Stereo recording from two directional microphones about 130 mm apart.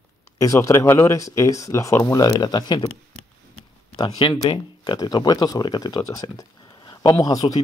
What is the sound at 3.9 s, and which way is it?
Speech, 35° left (ahead or behind).